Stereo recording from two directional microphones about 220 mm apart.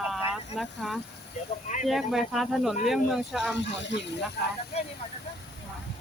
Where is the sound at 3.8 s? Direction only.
55° left (ahead or behind).